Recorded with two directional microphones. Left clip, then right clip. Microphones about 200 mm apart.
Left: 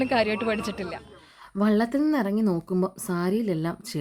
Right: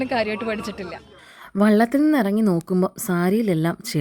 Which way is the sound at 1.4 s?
30° right (ahead or behind).